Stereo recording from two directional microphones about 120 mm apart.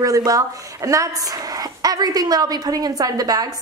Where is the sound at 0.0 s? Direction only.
30° right (ahead or behind).